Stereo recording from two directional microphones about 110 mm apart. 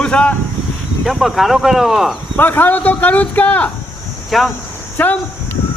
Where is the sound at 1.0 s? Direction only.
Centre (ahead or behind).